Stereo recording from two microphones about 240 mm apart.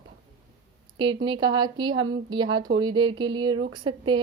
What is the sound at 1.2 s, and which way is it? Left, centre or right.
A woman's voice, centre.